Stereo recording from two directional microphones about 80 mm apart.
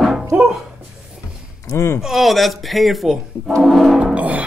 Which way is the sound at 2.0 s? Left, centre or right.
Centre.